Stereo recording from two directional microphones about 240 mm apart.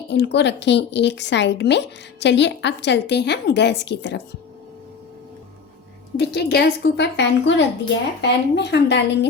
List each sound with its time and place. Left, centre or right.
0.1 s speech: left
6.1 s speech: left